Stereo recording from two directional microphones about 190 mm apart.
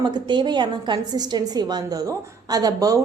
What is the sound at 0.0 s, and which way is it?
A woman's voice, 25° right (ahead or behind).